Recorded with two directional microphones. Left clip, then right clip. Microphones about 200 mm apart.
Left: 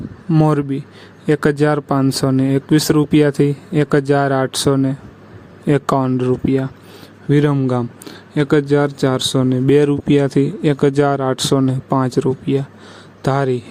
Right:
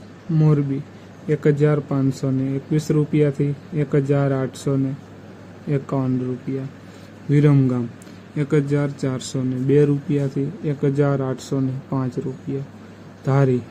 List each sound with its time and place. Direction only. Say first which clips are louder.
0.3 s speech: left 6 dB; 50° left (ahead or behind)
7.3 s speech: left 3 dB; 45° left (ahead or behind)